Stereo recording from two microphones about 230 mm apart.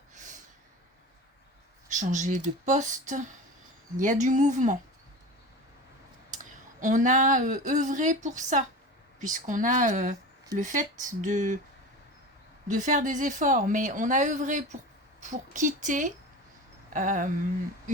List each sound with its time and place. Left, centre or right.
0.1 s snort: right
1.9 s a woman's voice: right
6.3 s a woman's voice: right
12.6 s a woman's voice: right